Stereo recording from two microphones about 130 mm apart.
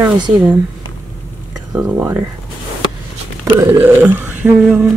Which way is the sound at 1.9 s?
15° right (ahead or behind).